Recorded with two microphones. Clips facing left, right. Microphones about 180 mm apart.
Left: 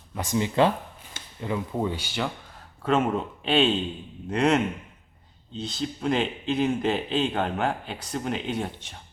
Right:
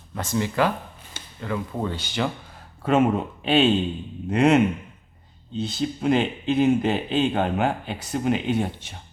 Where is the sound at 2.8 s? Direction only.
5° right (ahead or behind).